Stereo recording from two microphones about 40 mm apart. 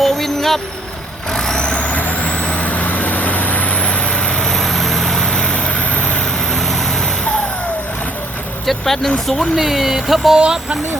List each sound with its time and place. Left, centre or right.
0.0 s vehicle: centre; by 1.9 s left
1.9 s vehicle: left
2.3 s vehicle: left
2.6 s vehicle: left; by 4.5 s centre
4.5 s vehicle: centre
5.4 s vehicle: left
6.5 s vehicle: centre
8.9 s speech: centre
9.6 s music: centre
10.3 s music: centre